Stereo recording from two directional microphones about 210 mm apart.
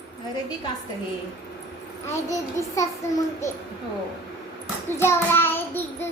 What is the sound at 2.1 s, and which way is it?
Child singing, 15° left (ahead or behind).